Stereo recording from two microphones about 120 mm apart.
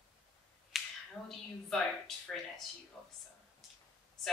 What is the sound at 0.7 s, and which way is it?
Finger snapping, centre (ahead or behind).